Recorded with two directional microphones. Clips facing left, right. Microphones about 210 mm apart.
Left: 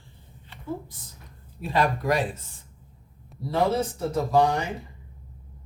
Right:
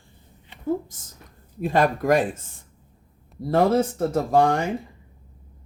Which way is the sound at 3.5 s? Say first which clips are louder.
Right 5 dB; 50° right (ahead or behind).